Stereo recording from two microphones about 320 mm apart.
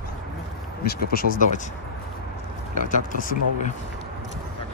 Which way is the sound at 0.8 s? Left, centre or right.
Left.